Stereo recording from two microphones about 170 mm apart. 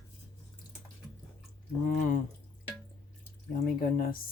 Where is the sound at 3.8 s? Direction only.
55° left (ahead or behind).